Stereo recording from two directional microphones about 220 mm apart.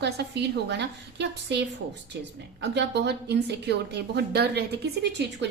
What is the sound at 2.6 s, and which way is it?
A woman's voice, 50° right (ahead or behind).